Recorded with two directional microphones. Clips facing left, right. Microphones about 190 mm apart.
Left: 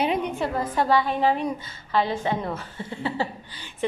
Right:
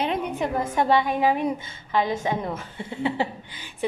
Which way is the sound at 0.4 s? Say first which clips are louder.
Right 1 dB; 20° right (ahead or behind).